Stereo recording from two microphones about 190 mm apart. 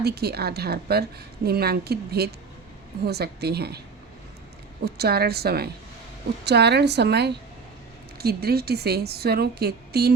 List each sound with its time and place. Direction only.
0.0 s a woman's voice: 55° right (ahead or behind)
4.9 s a woman's voice: 55° right (ahead or behind)